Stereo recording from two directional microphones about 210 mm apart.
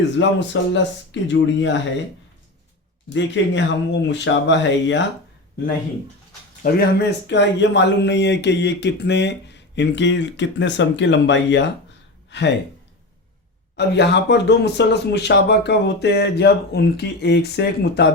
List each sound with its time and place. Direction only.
0.2 s speech: 60° left (ahead or behind)
3.1 s speech: 60° left (ahead or behind)
6.6 s speech: 50° left (ahead or behind)
13.7 s speech: 55° left (ahead or behind)